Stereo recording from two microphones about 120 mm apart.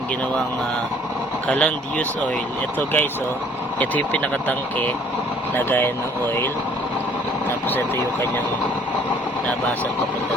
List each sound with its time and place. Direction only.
1.5 s speech: 10° left (ahead or behind)